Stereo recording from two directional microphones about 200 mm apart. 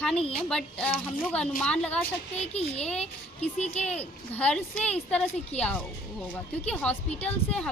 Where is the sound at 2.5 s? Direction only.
30° left (ahead or behind).